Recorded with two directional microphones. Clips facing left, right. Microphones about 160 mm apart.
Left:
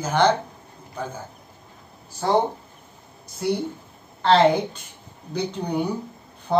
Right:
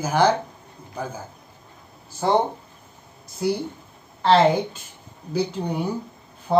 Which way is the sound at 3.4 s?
Centre (ahead or behind).